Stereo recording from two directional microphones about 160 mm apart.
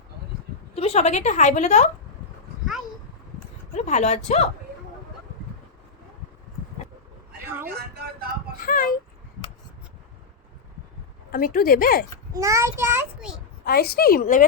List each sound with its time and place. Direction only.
0.8 s a woman's voice: 40° left (ahead or behind)
3.8 s a woman's voice: 45° left (ahead or behind)
7.9 s speech: 75° right (ahead or behind)
8.6 s speech: 60° left (ahead or behind)
11.3 s speech: 65° left (ahead or behind)
12.3 s a child's voice: 20° right (ahead or behind)
13.7 s a woman's voice: 75° left (ahead or behind); by 14.4 s 55° left (ahead or behind)